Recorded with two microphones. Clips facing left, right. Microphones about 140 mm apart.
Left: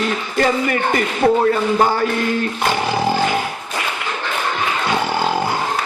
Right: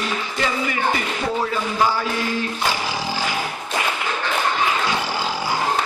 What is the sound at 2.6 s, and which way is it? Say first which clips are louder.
Roar: left 6 dB; 55° left (ahead or behind).